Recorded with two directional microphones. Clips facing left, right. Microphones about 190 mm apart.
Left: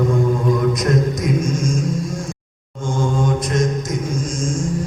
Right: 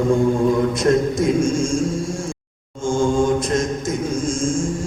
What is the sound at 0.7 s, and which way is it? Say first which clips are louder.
A man's voice: right 2 dB; 30° right (ahead or behind).